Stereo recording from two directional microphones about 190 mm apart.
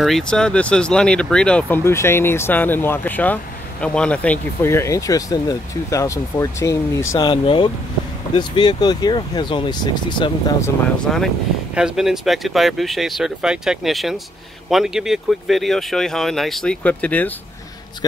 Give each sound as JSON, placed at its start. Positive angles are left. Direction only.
{"t": 0.0, "sound": "speech", "side_deg": 0}
{"t": 11.1, "sound": "speech", "side_deg": 0}